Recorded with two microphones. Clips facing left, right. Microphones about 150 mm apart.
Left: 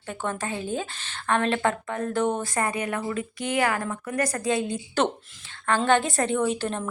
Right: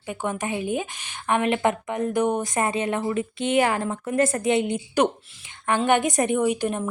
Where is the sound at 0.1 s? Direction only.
15° right (ahead or behind).